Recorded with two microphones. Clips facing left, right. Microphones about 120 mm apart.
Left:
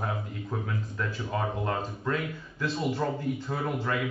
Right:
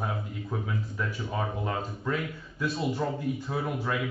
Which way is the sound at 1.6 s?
5° right (ahead or behind).